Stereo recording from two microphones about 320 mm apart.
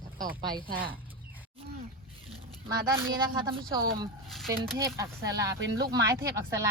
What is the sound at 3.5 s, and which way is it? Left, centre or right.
Speech, centre.